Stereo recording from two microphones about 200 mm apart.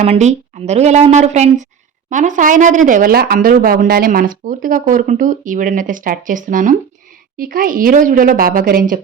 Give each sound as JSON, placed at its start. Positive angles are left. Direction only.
{"t": 0.0, "sound": "a woman's voice", "side_deg": -35}